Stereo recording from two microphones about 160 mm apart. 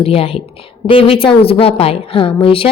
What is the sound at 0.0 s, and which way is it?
A woman's voice, 35° left (ahead or behind).